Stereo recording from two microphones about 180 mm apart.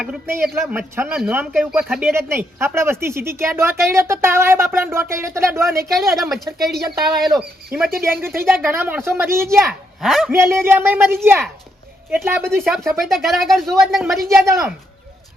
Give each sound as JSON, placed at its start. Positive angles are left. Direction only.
{"t": 0.0, "sound": "speech", "side_deg": -5}
{"t": 2.1, "sound": "speech", "side_deg": -15}
{"t": 5.9, "sound": "speech", "side_deg": 0}
{"t": 8.0, "sound": "speech", "side_deg": -15}
{"t": 10.0, "sound": "speech", "side_deg": 0}
{"t": 10.3, "sound": "speech", "side_deg": -15}
{"t": 12.6, "sound": "speech", "side_deg": 0}
{"t": 14.3, "sound": "speech", "side_deg": -15}